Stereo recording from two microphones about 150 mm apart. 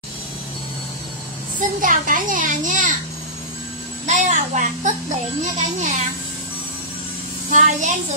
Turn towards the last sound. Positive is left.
turn(degrees=-60)  # may be behind; listen again after turning